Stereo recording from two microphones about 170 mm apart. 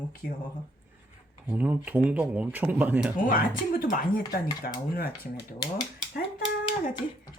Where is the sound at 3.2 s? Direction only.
55° left (ahead or behind).